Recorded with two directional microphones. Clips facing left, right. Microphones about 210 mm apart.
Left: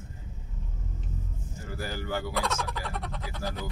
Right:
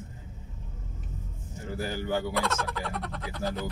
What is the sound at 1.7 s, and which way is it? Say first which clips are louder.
Speech: right 3 dB; 20° right (ahead or behind).